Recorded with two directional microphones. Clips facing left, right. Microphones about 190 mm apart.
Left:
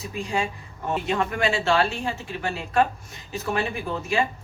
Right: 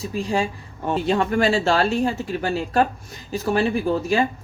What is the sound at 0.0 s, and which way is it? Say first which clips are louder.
Speech: right 4 dB; 35° right (ahead or behind).